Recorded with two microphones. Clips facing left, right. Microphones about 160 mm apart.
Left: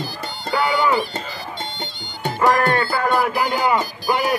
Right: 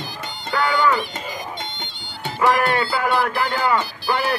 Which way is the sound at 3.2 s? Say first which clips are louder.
Left 2 dB; 10° left (ahead or behind).